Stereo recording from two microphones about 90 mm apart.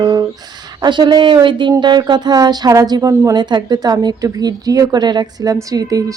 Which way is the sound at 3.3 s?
55° right (ahead or behind).